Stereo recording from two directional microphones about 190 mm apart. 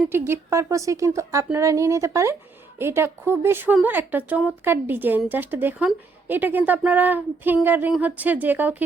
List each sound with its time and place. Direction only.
0.1 s speech: 15° right (ahead or behind)